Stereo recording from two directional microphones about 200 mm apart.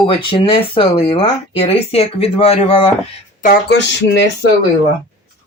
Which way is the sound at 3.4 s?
50° left (ahead or behind).